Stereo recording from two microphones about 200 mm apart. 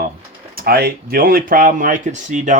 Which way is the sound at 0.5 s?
50° right (ahead or behind).